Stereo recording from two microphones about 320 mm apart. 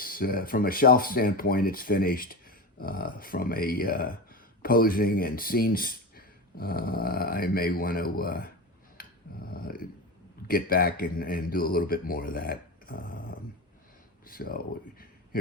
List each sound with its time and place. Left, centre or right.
0.0 s speech: left
9.0 s a sound: left
9.5 s speech: left